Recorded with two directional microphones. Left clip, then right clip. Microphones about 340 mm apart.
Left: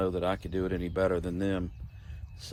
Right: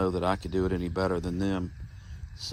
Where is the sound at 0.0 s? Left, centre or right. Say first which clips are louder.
Right 2 dB; centre.